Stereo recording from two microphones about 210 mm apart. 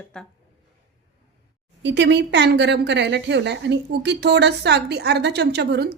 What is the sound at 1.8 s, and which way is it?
A woman's voice, 55° right (ahead or behind).